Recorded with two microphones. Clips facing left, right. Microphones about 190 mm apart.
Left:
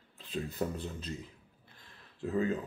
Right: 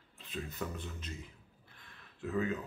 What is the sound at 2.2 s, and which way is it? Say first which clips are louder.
Speech: left 3 dB; 30° left (ahead or behind).